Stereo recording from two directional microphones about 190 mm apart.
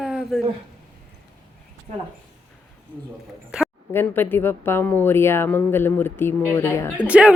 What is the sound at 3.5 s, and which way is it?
Speech, 5° right (ahead or behind).